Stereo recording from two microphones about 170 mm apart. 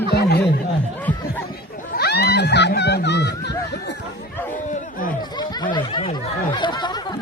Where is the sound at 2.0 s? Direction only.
70° left (ahead or behind).